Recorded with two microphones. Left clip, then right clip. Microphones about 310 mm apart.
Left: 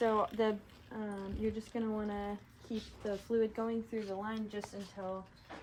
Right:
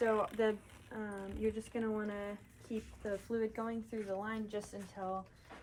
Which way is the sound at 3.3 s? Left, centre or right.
Centre.